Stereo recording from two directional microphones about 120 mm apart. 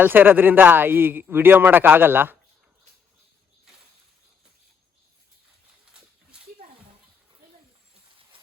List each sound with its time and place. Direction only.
0.0 s a man's voice: 15° right (ahead or behind)